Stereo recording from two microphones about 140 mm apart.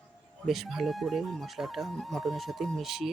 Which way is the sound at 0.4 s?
Centre (ahead or behind).